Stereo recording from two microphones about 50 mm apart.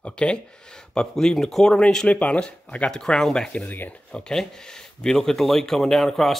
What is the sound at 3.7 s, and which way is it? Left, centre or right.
Speech, left.